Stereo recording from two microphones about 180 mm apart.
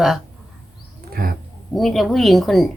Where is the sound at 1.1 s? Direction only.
55° right (ahead or behind).